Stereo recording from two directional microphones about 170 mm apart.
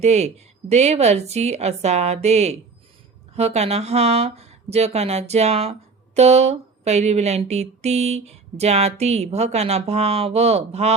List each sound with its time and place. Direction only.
0.0 s speech: 40° right (ahead or behind)